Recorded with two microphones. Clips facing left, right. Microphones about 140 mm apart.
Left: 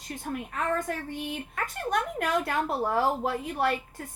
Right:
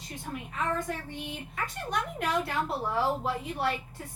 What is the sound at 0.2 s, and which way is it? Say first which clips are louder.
A woman's voice: left 2 dB; 50° left (ahead or behind).